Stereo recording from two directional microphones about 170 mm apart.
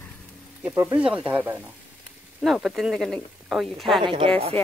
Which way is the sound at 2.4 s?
Centre (ahead or behind).